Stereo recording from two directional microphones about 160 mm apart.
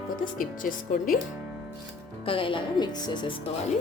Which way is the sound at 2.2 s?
35° left (ahead or behind).